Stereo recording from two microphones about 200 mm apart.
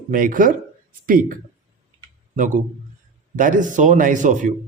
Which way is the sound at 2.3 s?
40° right (ahead or behind).